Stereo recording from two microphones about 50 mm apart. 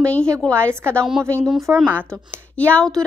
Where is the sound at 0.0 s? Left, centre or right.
Centre.